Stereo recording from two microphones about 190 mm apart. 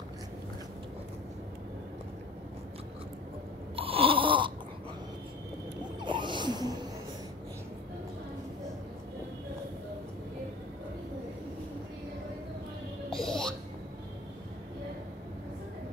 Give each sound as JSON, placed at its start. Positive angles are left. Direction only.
{"t": 3.7, "sound": "a sound", "side_deg": -30}
{"t": 5.9, "sound": "gasp", "side_deg": -25}
{"t": 13.1, "sound": "music", "side_deg": 5}